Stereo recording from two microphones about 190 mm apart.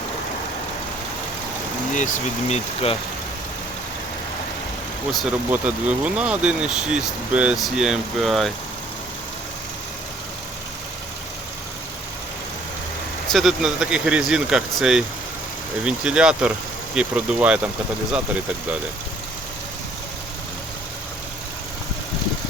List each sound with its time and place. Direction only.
1.9 s speech: 40° left (ahead or behind)
5.1 s speech: 5° right (ahead or behind)
13.2 s speech: centre (ahead or behind)